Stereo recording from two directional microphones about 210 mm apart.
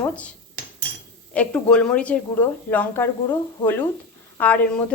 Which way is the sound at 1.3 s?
5° left (ahead or behind).